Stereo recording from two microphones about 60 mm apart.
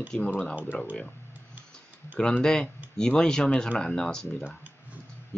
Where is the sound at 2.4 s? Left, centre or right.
Centre.